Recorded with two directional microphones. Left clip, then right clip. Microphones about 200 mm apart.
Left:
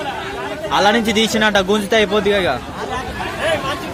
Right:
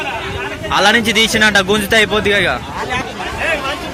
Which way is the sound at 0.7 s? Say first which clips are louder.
Right 3 dB; 10° left (ahead or behind).